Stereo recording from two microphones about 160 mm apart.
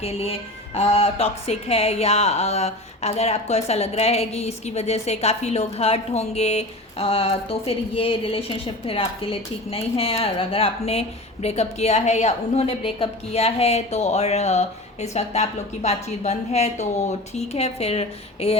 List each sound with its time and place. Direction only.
0.0 s speech: 40° left (ahead or behind)